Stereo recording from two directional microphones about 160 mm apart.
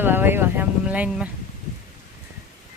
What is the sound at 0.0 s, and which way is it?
Speech, 15° right (ahead or behind).